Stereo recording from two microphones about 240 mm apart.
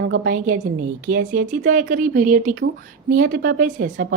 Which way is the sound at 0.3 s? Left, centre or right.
Right.